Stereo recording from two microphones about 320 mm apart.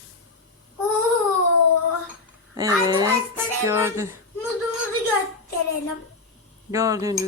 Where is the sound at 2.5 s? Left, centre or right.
Centre.